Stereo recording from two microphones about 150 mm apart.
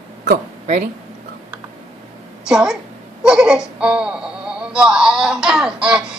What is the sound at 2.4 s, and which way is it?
A woman's voice, 5° right (ahead or behind).